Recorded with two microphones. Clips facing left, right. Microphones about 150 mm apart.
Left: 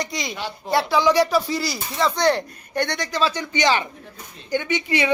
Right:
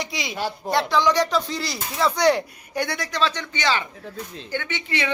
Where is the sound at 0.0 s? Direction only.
5° right (ahead or behind).